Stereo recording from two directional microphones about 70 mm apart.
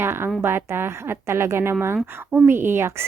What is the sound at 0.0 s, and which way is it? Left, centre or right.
A woman's voice, right.